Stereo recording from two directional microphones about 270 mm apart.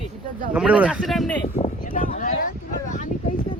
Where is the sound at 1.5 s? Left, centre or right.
Left.